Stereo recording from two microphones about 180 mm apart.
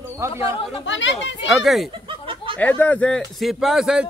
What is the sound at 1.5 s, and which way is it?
Speech, centre (ahead or behind).